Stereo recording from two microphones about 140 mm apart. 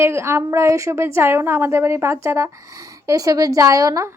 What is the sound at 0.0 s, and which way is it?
A woman's voice, 20° right (ahead or behind).